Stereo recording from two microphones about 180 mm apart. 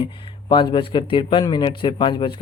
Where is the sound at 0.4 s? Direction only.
25° left (ahead or behind).